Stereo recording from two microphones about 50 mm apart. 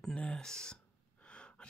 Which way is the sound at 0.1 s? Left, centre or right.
Centre.